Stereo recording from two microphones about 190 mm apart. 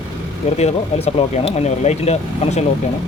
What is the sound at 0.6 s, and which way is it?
Speech, 35° left (ahead or behind).